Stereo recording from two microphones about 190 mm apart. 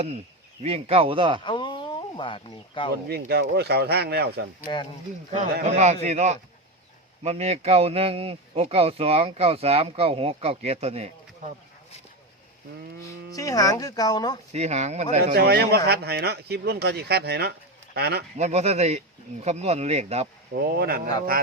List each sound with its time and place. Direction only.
0.6 s a man's voice: 30° right (ahead or behind)
1.5 s speech: 25° left (ahead or behind)
3.1 s speech: 55° right (ahead or behind)
5.6 s a man's voice: 40° right (ahead or behind)
13.3 s speech: 20° left (ahead or behind)
14.5 s a man's voice: 35° right (ahead or behind)
15.4 s speech: 60° right (ahead or behind)
18.3 s a man's voice: 35° right (ahead or behind)
20.5 s speech: 55° right (ahead or behind)